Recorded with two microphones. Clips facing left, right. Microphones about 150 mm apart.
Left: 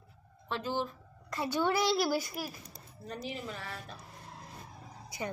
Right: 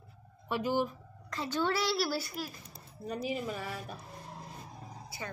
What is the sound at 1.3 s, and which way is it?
A woman's voice, 15° left (ahead or behind).